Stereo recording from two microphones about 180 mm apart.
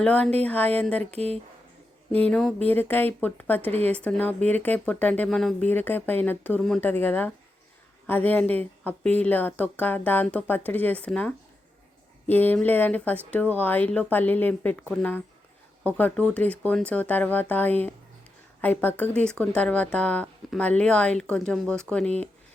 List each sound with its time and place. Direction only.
0.0 s speech: 5° left (ahead or behind)
1.1 s speech: 35° right (ahead or behind)
2.1 s speech: 5° left (ahead or behind)